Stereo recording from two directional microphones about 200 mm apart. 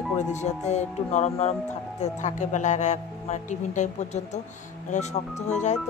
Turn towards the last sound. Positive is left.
turn(degrees=35)  # may be behind; listen again after turning